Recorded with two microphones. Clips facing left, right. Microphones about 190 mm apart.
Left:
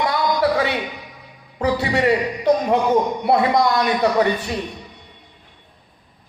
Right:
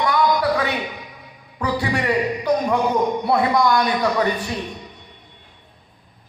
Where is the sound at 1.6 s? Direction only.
25° left (ahead or behind).